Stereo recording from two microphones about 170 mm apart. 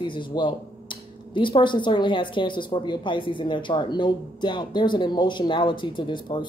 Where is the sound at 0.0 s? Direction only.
30° left (ahead or behind).